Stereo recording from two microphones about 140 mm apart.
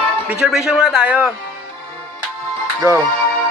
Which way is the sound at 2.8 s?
20° right (ahead or behind).